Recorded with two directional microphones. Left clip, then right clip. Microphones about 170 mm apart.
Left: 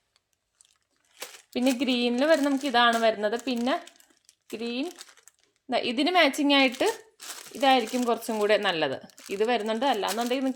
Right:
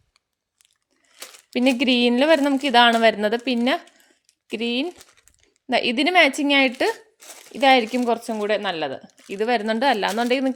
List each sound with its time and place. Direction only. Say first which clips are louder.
1.8 s a woman's voice: right 7 dB; 50° right (ahead or behind); by 6.9 s 30° right (ahead or behind)
7.5 s speech: right 6 dB; 40° right (ahead or behind)
8.0 s speech: right 3 dB; 20° right (ahead or behind)
9.3 s a woman's voice: right 4 dB; 25° right (ahead or behind); by 10.5 s 45° right (ahead or behind)